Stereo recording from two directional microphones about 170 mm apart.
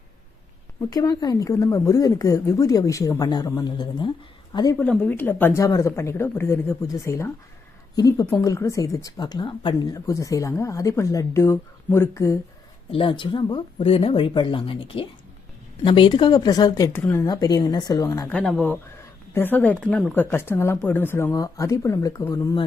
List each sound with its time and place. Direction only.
0.8 s a woman's voice: 20° left (ahead or behind)
4.8 s a woman's voice: 10° left (ahead or behind)
12.9 s a woman's voice: 30° left (ahead or behind)
18.3 s speech: 5° left (ahead or behind); by 22.6 s 20° left (ahead or behind)